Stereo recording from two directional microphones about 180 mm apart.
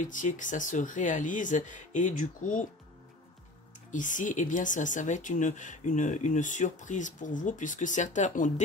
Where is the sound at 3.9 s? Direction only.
45° left (ahead or behind).